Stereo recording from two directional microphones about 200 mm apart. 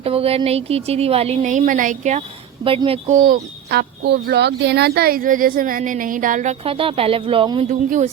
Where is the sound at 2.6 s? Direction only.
25° right (ahead or behind).